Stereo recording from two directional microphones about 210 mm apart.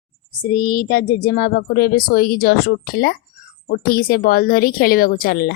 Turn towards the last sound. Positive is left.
turn(degrees=45)  # may be behind; listen again after turning